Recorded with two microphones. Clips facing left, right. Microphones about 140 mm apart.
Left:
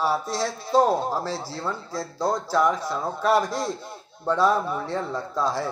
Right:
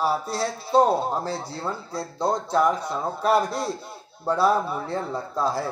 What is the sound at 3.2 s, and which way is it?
Speech, 35° right (ahead or behind).